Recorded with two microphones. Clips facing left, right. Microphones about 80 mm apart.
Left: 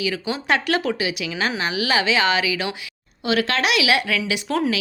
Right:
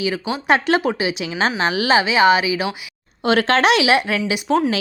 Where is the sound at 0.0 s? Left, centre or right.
Right.